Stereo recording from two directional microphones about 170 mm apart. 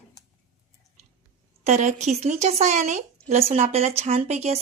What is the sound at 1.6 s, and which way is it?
Speech, 45° right (ahead or behind).